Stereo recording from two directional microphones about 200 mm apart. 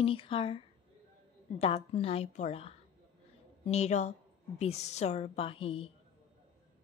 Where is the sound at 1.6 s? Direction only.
30° left (ahead or behind).